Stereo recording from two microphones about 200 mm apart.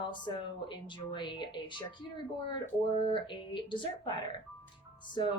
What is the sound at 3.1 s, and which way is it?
A woman's voice, 25° left (ahead or behind).